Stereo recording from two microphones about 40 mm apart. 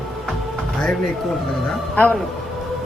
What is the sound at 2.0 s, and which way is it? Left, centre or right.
Speech, left.